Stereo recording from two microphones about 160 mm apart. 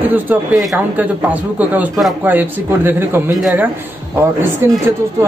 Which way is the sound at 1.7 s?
5° right (ahead or behind).